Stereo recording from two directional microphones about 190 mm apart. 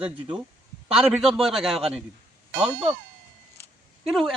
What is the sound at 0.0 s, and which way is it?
Speech, 30° right (ahead or behind).